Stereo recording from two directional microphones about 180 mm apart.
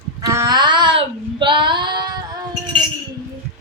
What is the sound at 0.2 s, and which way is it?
Child singing, 20° right (ahead or behind).